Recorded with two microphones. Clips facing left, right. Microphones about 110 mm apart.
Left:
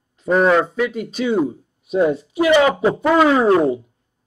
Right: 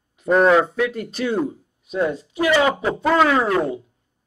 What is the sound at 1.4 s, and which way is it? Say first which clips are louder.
Speech: left 4 dB; 20° left (ahead or behind).